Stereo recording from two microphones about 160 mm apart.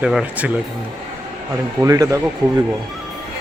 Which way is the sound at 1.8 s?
20° right (ahead or behind).